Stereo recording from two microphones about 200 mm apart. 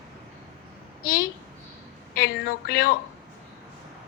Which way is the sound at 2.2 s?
50° left (ahead or behind).